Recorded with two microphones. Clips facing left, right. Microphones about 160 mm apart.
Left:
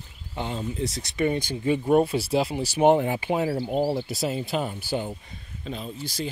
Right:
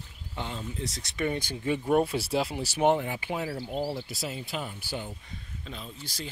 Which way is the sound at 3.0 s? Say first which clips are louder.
Left 8 dB; 25° left (ahead or behind).